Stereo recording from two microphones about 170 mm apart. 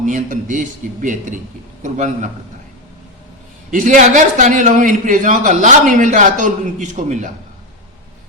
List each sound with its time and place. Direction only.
0.0 s a man's voice: 50° right (ahead or behind)
3.7 s a man's voice: 50° right (ahead or behind)